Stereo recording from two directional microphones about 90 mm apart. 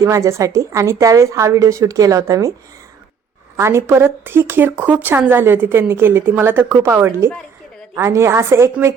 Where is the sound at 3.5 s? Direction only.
30° right (ahead or behind).